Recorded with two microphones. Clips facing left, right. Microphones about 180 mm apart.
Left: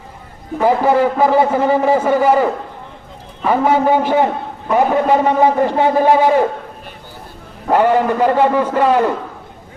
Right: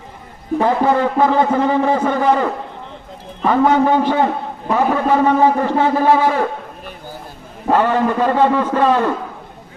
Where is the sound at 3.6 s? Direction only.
10° left (ahead or behind).